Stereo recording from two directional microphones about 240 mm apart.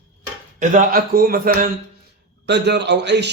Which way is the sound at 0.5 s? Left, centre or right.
Right.